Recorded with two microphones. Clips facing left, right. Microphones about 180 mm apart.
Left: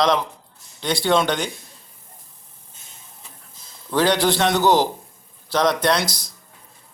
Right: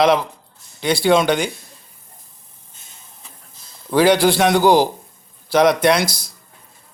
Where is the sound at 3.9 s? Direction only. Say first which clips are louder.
Right 5 dB; 10° right (ahead or behind).